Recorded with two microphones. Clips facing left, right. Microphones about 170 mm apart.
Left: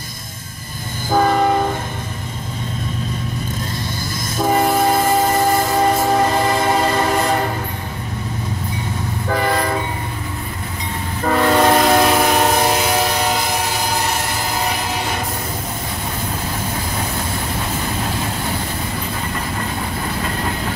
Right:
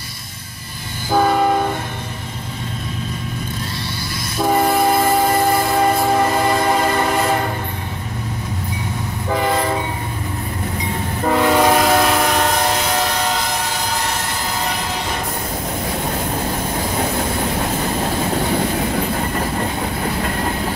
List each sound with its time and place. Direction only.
1.2 s train: centre (ahead or behind)
4.5 s train: 10° left (ahead or behind)
9.3 s train: 20° right (ahead or behind)
11.2 s train: 10° right (ahead or behind); by 13.6 s 10° left (ahead or behind)